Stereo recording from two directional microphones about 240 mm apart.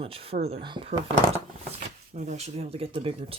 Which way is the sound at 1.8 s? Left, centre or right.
Right.